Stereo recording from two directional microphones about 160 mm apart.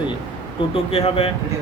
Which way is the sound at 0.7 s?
40° left (ahead or behind).